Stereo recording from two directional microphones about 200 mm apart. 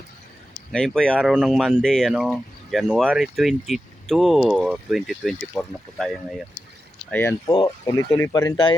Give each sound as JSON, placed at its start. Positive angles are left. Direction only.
{"t": 0.7, "sound": "speech", "side_deg": 5}
{"t": 7.1, "sound": "speech", "side_deg": 10}
{"t": 7.5, "sound": "speech", "side_deg": 20}